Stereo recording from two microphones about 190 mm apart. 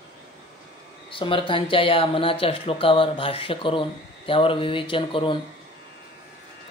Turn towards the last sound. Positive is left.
turn(degrees=25)  # may be behind; listen again after turning